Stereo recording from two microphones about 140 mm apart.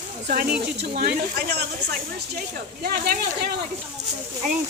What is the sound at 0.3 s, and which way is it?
Speech, 90° right.